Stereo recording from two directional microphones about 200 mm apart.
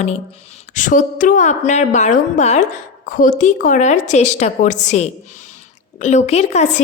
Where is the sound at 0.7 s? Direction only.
40° left (ahead or behind).